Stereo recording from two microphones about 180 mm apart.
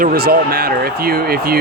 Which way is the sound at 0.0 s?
55° right (ahead or behind).